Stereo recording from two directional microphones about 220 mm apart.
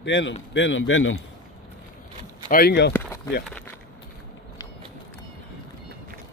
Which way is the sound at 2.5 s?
45° left (ahead or behind).